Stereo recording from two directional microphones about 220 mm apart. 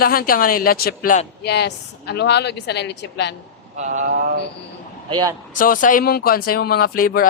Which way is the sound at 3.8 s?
35° right (ahead or behind).